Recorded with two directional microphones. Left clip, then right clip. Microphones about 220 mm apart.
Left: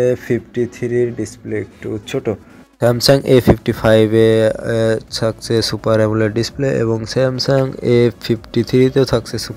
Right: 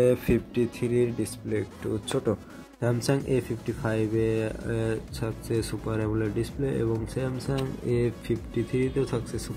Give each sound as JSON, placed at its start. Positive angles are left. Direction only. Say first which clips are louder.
{"t": 0.0, "sound": "speech", "louder": "left 7 dB", "side_deg": 10}
{"t": 2.8, "sound": "speech", "louder": "left 15 dB", "side_deg": 30}